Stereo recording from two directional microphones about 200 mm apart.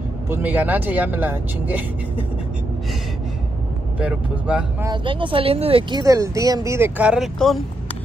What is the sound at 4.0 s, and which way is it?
Speech, 5° right (ahead or behind).